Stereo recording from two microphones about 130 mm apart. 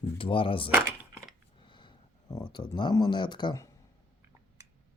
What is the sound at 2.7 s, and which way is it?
Speech, 35° left (ahead or behind).